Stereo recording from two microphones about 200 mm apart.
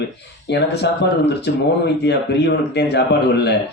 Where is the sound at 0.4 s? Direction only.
60° left (ahead or behind).